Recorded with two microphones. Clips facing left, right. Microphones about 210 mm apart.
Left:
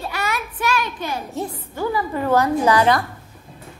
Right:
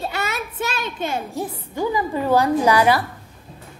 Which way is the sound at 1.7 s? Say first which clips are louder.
Right 1 dB; 15° right (ahead or behind).